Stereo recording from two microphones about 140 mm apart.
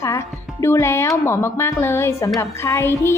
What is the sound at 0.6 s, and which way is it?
A woman's voice, 20° left (ahead or behind).